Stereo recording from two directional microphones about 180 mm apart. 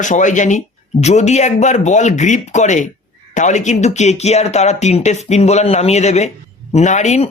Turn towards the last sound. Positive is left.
turn(degrees=40)  # may be behind; listen again after turning